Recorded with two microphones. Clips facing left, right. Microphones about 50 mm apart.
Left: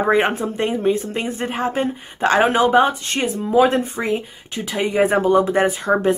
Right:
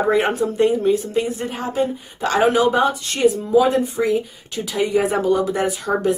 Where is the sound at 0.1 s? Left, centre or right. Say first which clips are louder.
Even; left.